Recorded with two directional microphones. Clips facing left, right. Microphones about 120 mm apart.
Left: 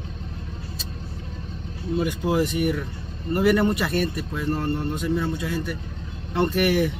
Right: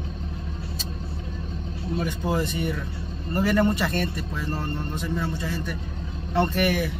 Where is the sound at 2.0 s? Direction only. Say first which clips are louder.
Left 4 dB; 10° left (ahead or behind).